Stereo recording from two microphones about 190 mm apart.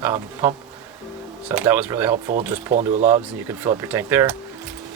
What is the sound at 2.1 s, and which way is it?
Speech, 40° right (ahead or behind).